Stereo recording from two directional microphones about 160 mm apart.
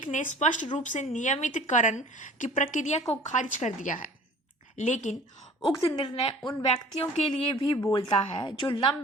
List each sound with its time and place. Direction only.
0.0 s speech: 55° left (ahead or behind)
5.6 s a woman's voice: 25° left (ahead or behind)